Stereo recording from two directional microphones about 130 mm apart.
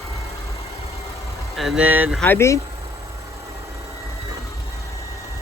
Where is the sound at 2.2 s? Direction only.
20° left (ahead or behind).